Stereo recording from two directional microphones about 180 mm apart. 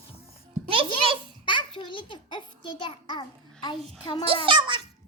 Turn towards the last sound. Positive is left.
turn(degrees=-25)  # may be behind; listen again after turning